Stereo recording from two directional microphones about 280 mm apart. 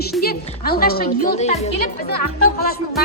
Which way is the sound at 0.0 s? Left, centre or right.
Left.